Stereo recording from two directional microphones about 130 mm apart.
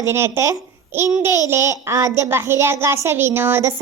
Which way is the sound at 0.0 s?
20° right (ahead or behind).